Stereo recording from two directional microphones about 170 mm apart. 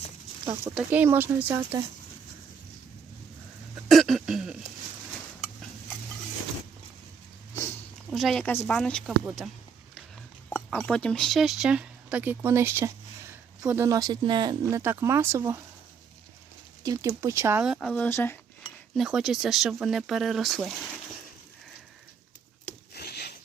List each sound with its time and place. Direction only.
0.7 s speech: 5° right (ahead or behind)
3.8 s throat clearing: centre (ahead or behind)
8.1 s speech: centre (ahead or behind)
10.8 s speech: 5° left (ahead or behind); by 14.8 s 25° right (ahead or behind)
14.8 s speech: 15° right (ahead or behind)
16.8 s speech: 20° right (ahead or behind); by 18.3 s 10° left (ahead or behind)
18.9 s speech: 5° right (ahead or behind)
23.0 s a sound: 70° left (ahead or behind)